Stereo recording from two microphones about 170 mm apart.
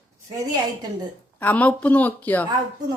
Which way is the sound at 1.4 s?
10° left (ahead or behind).